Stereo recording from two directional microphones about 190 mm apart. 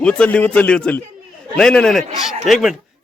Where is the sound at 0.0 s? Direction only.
5° left (ahead or behind).